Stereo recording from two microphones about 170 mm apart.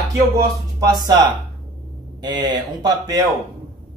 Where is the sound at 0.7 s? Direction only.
20° right (ahead or behind).